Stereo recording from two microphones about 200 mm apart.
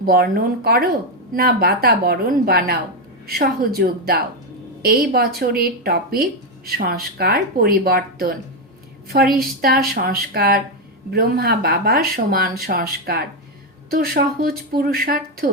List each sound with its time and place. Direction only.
0.0 s speech: 50° right (ahead or behind)